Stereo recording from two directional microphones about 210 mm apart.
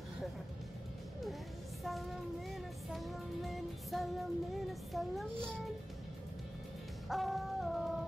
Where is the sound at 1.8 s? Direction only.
Centre (ahead or behind).